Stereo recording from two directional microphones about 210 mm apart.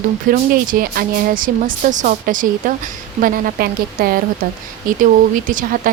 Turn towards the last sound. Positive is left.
turn(degrees=-40)  # may be behind; listen again after turning